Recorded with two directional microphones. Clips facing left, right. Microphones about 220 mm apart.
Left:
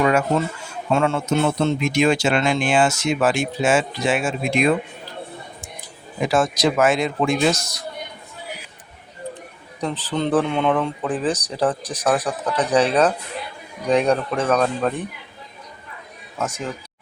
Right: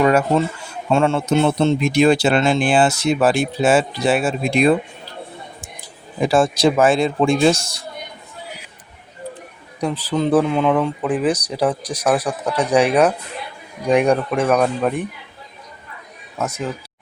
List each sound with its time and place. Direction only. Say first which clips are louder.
0.0 s a sound: right 3 dB; 35° right (ahead or behind)
0.9 s speech: right 3 dB; 30° right (ahead or behind)
6.1 s a man's voice: right 3 dB; 30° right (ahead or behind)
9.8 s speech: right 3 dB; 10° right (ahead or behind)
16.4 s speech: right 2 dB; 10° right (ahead or behind)